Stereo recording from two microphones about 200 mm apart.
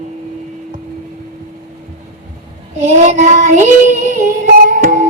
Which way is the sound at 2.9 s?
35° right (ahead or behind).